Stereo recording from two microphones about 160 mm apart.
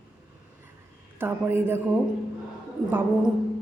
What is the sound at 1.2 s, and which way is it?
Speech, 15° right (ahead or behind).